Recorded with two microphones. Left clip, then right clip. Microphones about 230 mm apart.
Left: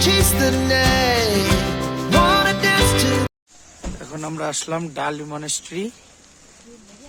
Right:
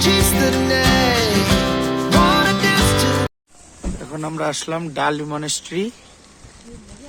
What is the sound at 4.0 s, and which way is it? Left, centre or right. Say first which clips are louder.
Speech: right 3 dB; centre.